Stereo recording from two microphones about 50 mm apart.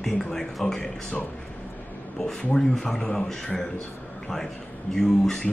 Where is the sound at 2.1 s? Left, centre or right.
Centre.